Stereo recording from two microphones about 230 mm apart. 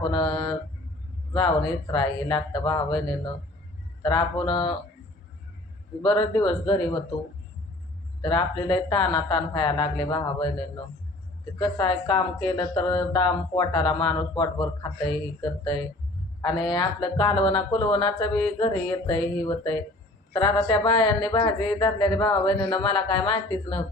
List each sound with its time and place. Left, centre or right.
0.0 s speech: left
4.0 s speech: left
6.0 s speech: left
8.2 s speech: left
11.6 s speech: left